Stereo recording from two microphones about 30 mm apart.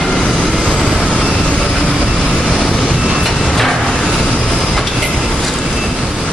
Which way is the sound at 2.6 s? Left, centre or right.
Left.